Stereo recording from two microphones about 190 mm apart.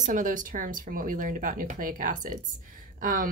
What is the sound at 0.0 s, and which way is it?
Speech, 45° right (ahead or behind).